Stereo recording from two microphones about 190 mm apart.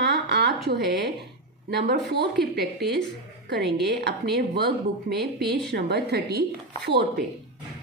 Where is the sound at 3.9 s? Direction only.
65° right (ahead or behind).